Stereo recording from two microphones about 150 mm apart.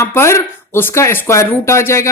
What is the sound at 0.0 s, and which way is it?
Speech, 20° left (ahead or behind).